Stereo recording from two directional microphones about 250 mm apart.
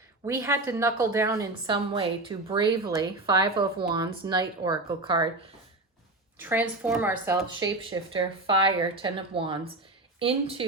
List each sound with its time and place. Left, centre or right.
0.3 s a woman's voice: centre
6.4 s a woman's voice: centre; by 10.7 s right